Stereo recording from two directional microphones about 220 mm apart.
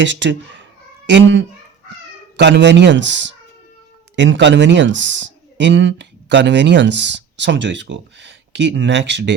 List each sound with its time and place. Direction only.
0.0 s a child's voice: 55° right (ahead or behind)